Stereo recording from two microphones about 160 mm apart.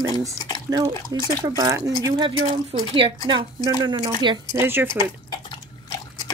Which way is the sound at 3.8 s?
30° right (ahead or behind).